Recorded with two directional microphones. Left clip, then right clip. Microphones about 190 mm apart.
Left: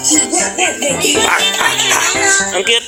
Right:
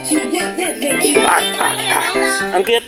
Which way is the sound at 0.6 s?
75° right (ahead or behind).